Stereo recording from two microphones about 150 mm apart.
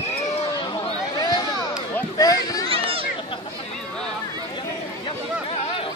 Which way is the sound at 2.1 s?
25° left (ahead or behind).